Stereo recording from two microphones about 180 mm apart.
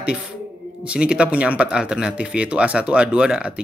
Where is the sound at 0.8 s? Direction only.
5° right (ahead or behind).